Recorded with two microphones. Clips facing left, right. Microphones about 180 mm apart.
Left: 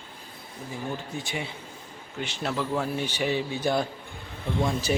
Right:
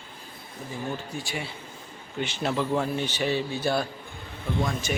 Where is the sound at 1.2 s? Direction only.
20° left (ahead or behind).